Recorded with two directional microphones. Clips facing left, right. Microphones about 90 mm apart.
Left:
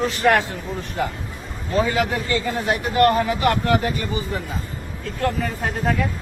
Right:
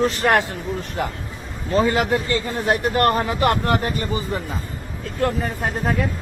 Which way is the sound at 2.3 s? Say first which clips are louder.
Right 1 dB; 45° right (ahead or behind).